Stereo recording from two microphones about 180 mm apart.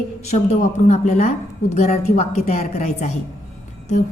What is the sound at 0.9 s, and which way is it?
Speech, 40° left (ahead or behind).